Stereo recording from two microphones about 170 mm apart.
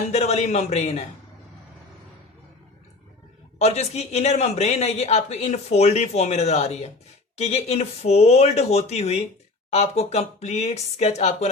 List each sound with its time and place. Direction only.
0.1 s speech: 40° left (ahead or behind)
3.6 s speech: 40° left (ahead or behind)